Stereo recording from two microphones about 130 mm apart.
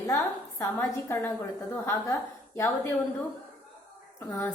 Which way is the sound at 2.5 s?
20° left (ahead or behind).